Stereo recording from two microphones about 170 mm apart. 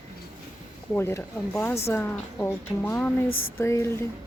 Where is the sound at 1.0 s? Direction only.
15° left (ahead or behind).